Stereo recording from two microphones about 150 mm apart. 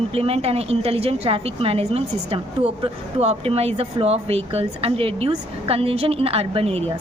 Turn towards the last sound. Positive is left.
turn(degrees=-40)  # may be behind; listen again after turning